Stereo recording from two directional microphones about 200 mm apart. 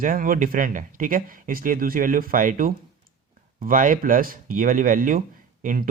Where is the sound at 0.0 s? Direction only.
45° right (ahead or behind).